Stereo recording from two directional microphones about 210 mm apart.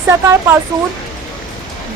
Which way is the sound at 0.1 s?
10° right (ahead or behind).